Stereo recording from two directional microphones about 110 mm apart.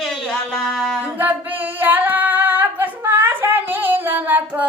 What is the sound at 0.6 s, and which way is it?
Singing, 5° left (ahead or behind).